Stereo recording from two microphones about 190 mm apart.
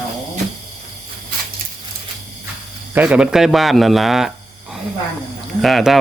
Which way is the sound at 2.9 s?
5° right (ahead or behind).